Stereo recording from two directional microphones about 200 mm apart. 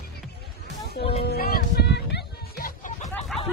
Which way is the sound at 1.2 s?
50° left (ahead or behind).